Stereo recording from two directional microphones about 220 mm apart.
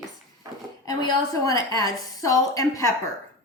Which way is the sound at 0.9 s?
15° left (ahead or behind).